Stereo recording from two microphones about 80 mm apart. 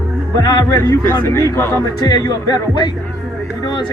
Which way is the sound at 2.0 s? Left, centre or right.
Left.